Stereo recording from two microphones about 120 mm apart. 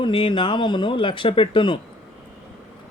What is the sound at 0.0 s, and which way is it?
Speech, 45° left (ahead or behind).